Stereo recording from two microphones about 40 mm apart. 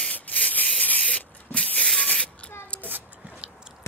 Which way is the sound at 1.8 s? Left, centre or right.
Left.